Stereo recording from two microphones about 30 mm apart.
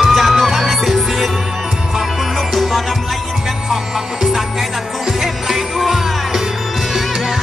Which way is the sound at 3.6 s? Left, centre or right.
Centre.